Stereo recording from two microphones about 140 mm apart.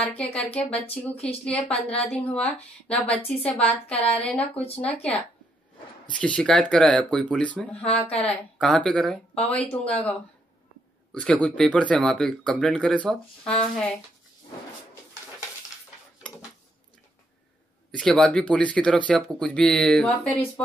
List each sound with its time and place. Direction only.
0.0 s speech: 10° left (ahead or behind)
3.6 s a woman's voice: 45° left (ahead or behind)
4.1 s speech: 10° left (ahead or behind)
4.6 s a woman's voice: 45° left (ahead or behind)
6.1 s speech: 10° left (ahead or behind)
17.9 s speech: 5° left (ahead or behind)